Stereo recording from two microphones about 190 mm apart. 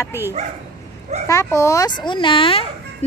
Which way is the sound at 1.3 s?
15° left (ahead or behind).